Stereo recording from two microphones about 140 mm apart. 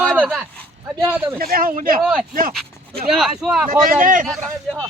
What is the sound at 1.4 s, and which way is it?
Speech, 90° right.